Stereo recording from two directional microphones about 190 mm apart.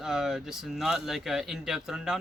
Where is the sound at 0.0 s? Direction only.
Centre (ahead or behind).